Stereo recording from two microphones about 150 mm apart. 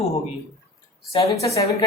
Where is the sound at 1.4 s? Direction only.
20° left (ahead or behind).